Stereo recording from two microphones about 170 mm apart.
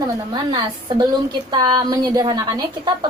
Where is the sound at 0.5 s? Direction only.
25° right (ahead or behind).